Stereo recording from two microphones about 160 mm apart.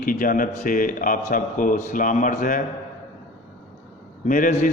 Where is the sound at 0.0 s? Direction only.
60° left (ahead or behind).